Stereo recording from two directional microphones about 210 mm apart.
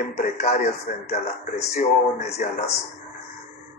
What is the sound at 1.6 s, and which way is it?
Speech, 30° left (ahead or behind).